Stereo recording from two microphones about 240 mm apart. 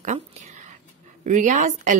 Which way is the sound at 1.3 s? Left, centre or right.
Right.